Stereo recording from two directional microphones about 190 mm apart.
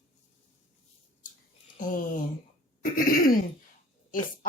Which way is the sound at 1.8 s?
45° left (ahead or behind).